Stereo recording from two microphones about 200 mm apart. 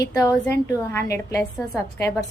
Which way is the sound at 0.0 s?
15° left (ahead or behind).